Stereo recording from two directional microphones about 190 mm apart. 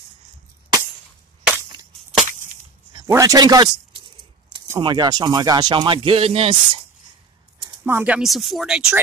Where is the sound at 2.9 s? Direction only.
15° right (ahead or behind).